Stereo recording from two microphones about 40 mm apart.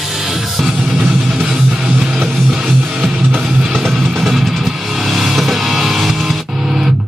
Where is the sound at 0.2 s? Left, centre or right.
Centre.